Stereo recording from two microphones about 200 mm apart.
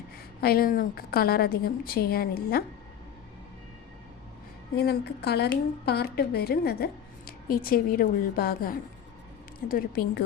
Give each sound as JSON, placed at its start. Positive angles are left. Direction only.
{"t": 0.4, "sound": "a woman's voice", "side_deg": 45}
{"t": 4.7, "sound": "a woman's voice", "side_deg": 55}